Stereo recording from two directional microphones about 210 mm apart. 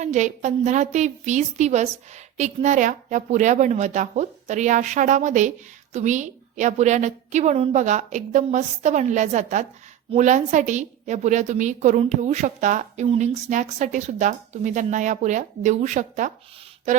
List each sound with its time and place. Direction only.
0.0 s a woman's voice: 35° right (ahead or behind)